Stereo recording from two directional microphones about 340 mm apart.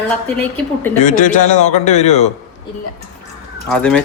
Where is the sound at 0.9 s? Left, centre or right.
Left.